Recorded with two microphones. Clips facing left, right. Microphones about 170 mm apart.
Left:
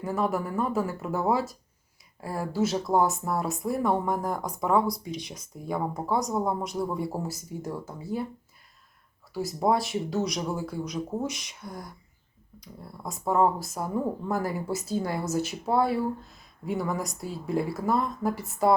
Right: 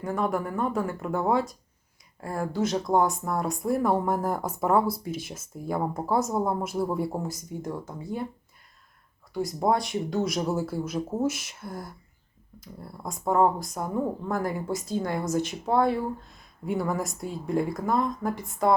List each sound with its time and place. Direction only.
0.0 s speech: 5° left (ahead or behind)
9.3 s speech: 5° left (ahead or behind)